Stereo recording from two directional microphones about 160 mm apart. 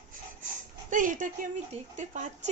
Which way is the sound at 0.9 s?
55° right (ahead or behind).